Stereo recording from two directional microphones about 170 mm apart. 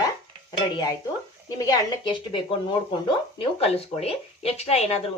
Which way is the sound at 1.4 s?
25° left (ahead or behind).